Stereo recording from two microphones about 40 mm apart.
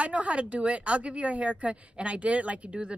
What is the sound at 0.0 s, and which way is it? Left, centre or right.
Speech, right.